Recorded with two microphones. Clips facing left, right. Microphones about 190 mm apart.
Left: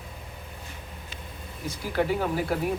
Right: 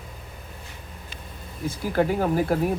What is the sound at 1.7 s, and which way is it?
Speech, 45° right (ahead or behind).